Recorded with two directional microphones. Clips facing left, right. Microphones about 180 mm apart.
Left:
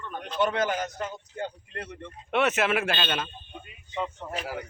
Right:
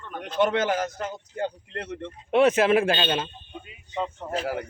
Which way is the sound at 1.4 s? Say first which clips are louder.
Right 5 dB; 70° right (ahead or behind).